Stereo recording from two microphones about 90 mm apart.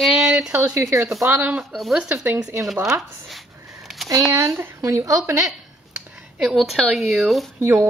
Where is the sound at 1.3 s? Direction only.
15° right (ahead or behind).